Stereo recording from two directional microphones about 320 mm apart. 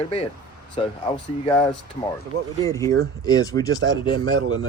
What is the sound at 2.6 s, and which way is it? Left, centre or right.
Speech, centre.